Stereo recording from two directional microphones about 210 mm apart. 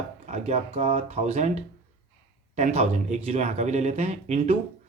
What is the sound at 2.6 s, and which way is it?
Speech, 30° right (ahead or behind).